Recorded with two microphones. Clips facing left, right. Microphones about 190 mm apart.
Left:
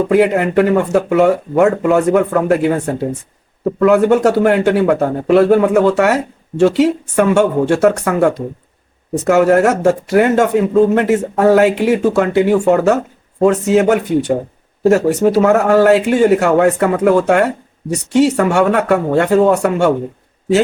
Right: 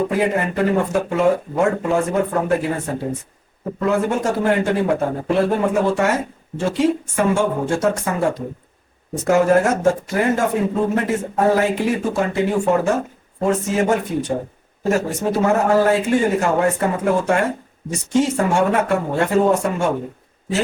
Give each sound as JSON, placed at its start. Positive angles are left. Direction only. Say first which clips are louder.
{"t": 0.1, "sound": "speech", "louder": "left 8 dB", "side_deg": 75}